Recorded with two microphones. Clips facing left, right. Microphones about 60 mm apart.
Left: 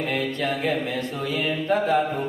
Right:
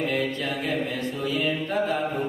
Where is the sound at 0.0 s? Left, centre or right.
Left.